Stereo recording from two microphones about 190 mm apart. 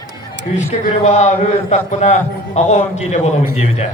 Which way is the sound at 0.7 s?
35° left (ahead or behind).